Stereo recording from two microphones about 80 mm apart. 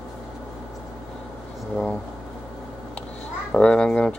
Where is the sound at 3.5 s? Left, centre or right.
Centre.